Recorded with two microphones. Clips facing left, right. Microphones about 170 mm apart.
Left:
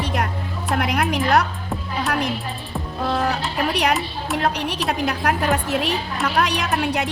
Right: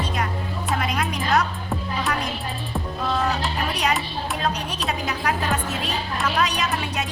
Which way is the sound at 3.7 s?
65° left (ahead or behind).